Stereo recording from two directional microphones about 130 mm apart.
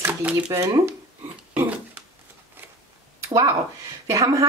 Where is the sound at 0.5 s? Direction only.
25° right (ahead or behind).